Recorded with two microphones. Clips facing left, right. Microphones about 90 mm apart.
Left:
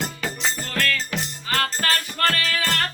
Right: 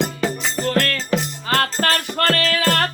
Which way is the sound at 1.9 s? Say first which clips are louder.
Right 4 dB; 75° right (ahead or behind).